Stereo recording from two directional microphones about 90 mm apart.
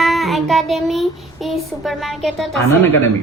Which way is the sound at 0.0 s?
Centre (ahead or behind).